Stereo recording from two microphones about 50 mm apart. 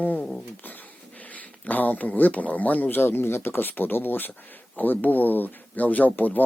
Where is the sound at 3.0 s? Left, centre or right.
Left.